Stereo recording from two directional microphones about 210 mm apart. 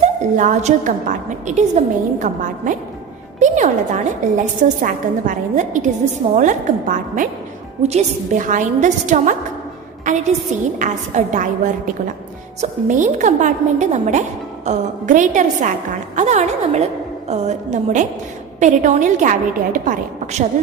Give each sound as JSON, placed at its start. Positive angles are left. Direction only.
{"t": 0.3, "sound": "a woman's voice", "side_deg": -35}
{"t": 12.6, "sound": "a woman's voice", "side_deg": -35}